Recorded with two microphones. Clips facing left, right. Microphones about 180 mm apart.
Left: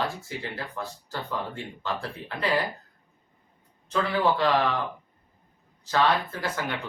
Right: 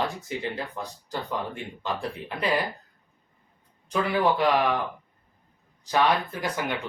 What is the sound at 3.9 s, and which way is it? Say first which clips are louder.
Speech: right 1 dB; 15° right (ahead or behind).